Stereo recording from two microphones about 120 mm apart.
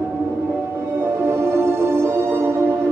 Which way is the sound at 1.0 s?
20° right (ahead or behind).